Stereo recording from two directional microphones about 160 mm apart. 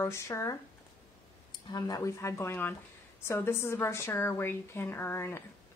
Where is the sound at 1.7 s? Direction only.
25° left (ahead or behind).